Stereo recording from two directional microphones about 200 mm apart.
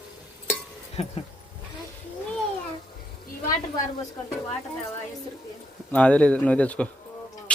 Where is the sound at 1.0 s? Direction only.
30° left (ahead or behind).